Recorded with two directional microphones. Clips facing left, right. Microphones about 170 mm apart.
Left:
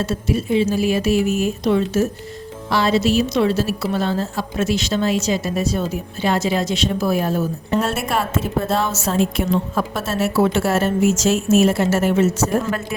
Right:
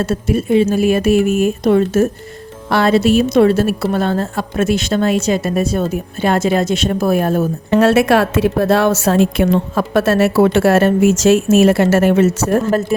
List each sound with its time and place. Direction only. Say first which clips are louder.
0.0 s a woman's voice: right 4 dB; 55° right (ahead or behind)
7.7 s a woman's voice: right 11 dB; 80° right; by 12.5 s 60° right (ahead or behind)